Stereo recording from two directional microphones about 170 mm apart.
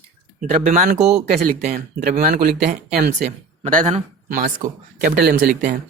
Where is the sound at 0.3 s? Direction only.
50° right (ahead or behind).